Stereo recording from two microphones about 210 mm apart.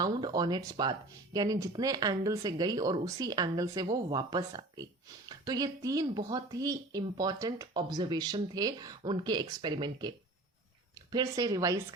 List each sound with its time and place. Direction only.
0.0 s speech: 20° right (ahead or behind)